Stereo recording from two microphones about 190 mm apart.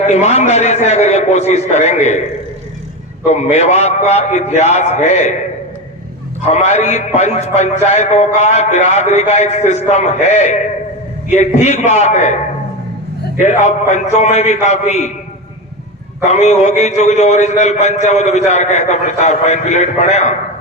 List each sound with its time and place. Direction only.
0.1 s a man's voice: 35° left (ahead or behind)
3.2 s a man's voice: 35° left (ahead or behind)
6.5 s a man's voice: 35° left (ahead or behind)
13.4 s a man's voice: 40° left (ahead or behind)
16.2 s a man's voice: 40° left (ahead or behind)